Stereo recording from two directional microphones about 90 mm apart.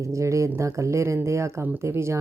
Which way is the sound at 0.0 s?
35° right (ahead or behind).